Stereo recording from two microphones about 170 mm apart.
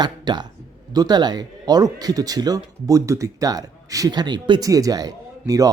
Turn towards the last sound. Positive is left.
turn(degrees=-20)  # may be behind; listen again after turning